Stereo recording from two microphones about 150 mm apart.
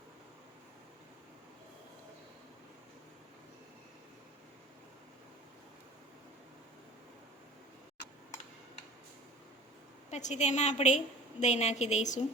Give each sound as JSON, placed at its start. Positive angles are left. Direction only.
{"t": 10.1, "sound": "a woman's voice", "side_deg": 50}